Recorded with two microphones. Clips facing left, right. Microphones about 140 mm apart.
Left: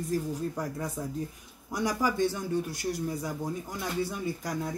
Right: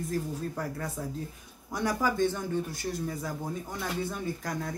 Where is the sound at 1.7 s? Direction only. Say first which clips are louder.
Even; 10° left (ahead or behind).